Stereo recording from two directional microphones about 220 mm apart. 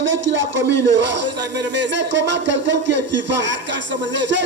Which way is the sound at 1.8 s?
55° right (ahead or behind).